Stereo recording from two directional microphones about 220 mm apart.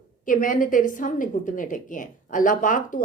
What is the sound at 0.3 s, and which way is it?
Speech, 40° left (ahead or behind).